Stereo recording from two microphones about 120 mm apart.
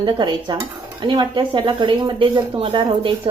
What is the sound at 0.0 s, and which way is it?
Speech, 35° right (ahead or behind).